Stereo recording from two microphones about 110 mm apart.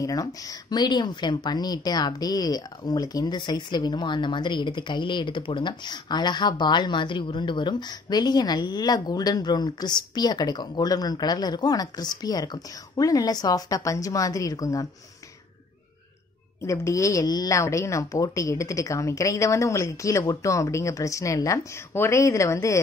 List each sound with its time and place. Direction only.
0.0 s a woman's voice: 35° left (ahead or behind)
16.6 s a woman's voice: 25° left (ahead or behind)